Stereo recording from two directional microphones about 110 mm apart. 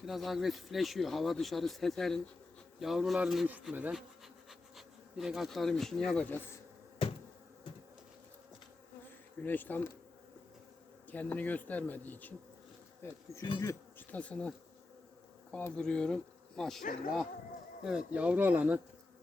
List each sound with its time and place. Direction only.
0.0 s speech: centre (ahead or behind)
5.1 s speech: 5° right (ahead or behind)
6.2 s bee: 20° left (ahead or behind)
9.4 s speech: 15° left (ahead or behind)
11.1 s speech: 15° left (ahead or behind)
13.0 s bee: 20° left (ahead or behind)
14.1 s speech: 10° left (ahead or behind)
15.7 s speech: 10° left (ahead or behind)
17.8 s speech: 10° right (ahead or behind)